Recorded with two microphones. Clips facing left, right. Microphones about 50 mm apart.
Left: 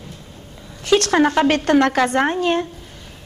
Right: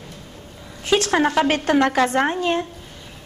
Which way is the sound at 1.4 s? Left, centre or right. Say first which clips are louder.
Left 3 dB; left.